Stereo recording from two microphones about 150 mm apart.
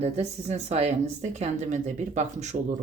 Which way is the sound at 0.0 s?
50° right (ahead or behind).